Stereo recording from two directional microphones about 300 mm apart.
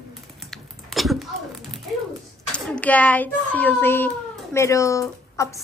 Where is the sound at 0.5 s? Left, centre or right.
Centre.